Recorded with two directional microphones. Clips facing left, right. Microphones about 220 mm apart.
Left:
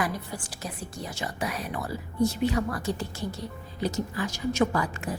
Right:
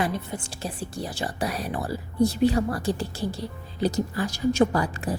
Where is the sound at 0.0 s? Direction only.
25° right (ahead or behind).